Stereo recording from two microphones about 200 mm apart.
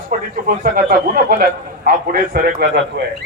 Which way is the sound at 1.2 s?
50° right (ahead or behind).